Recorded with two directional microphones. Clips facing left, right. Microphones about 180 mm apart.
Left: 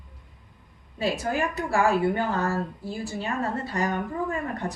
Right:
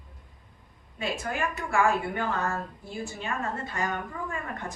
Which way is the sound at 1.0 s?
35° left (ahead or behind).